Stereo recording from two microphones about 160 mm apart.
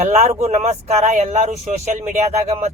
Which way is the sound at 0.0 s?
45° right (ahead or behind).